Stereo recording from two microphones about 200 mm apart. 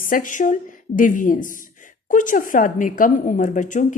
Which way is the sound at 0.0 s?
40° left (ahead or behind).